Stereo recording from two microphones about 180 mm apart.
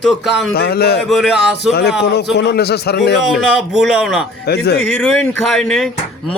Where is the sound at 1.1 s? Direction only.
Centre (ahead or behind).